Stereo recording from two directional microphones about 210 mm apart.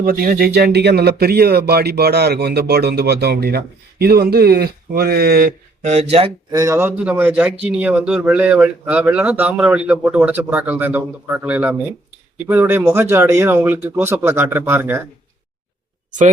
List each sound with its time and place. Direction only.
0.0 s speech: 45° right (ahead or behind)
6.5 s speech: 15° right (ahead or behind)